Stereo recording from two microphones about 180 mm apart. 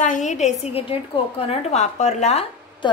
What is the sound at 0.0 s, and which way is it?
A woman's voice, 45° left (ahead or behind).